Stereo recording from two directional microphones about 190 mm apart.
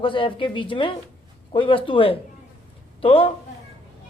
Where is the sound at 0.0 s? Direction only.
25° left (ahead or behind).